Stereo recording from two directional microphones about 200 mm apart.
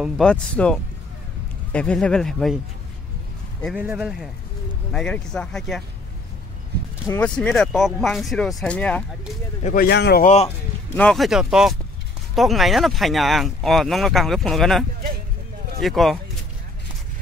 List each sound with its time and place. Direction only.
0.0 s speech: 5° left (ahead or behind)
3.7 s speech: 10° right (ahead or behind)
7.1 s speech: 5° left (ahead or behind)
9.6 s speech: 40° left (ahead or behind)
9.8 s speech: 55° left (ahead or behind)
10.2 s speech: 35° left (ahead or behind)
11.0 s speech: centre (ahead or behind)